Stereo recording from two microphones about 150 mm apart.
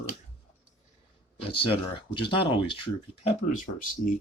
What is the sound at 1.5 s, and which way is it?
Speech, 35° left (ahead or behind).